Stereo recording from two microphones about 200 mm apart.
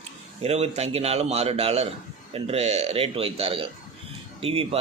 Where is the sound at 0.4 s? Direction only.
30° right (ahead or behind).